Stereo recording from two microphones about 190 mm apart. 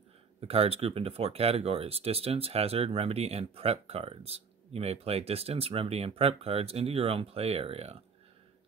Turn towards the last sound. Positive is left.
turn(degrees=-30)  # may be behind; listen again after turning